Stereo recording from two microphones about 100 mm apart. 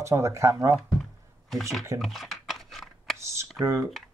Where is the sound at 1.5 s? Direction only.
Centre (ahead or behind).